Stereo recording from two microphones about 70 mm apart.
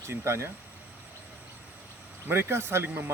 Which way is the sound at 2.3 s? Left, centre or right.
Right.